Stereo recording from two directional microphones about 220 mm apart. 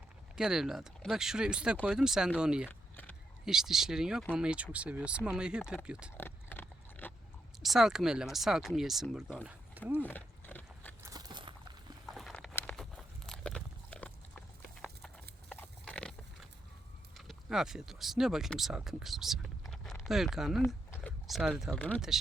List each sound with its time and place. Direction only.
0.3 s speech: 5° right (ahead or behind)
2.6 s a sound: 10° left (ahead or behind)
3.4 s speech: centre (ahead or behind)
6.1 s horse: 10° left (ahead or behind)
7.6 s speech: centre (ahead or behind)
10.0 s horse: 10° left (ahead or behind)
11.0 s a sound: 15° right (ahead or behind)
12.0 s a sound: centre (ahead or behind)
15.4 s horse: 5° left (ahead or behind)
17.2 s speech: centre (ahead or behind)